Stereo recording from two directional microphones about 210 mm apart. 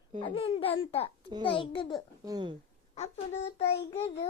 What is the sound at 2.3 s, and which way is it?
Speech, 20° right (ahead or behind).